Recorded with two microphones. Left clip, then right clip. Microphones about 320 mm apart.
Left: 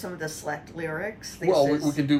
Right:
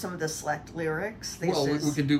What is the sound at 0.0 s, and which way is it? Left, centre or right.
Speech, centre.